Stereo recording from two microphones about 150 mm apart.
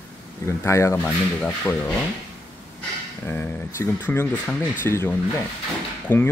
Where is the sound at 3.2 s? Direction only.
15° left (ahead or behind).